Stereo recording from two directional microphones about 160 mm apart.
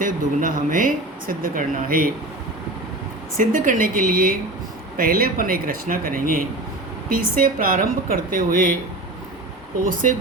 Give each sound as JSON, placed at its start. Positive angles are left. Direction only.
{"t": 0.0, "sound": "speech", "side_deg": -55}
{"t": 3.3, "sound": "speech", "side_deg": -55}
{"t": 9.9, "sound": "speech", "side_deg": -60}